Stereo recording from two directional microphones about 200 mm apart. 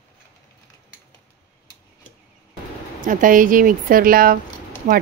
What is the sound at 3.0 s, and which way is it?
A woman's voice, 40° right (ahead or behind).